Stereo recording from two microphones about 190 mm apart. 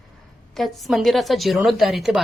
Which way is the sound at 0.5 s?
Centre (ahead or behind).